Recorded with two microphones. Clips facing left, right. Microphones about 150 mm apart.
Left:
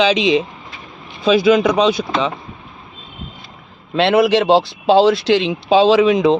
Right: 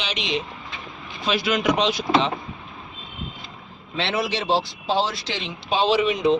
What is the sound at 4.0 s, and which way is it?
Speech, 60° left (ahead or behind).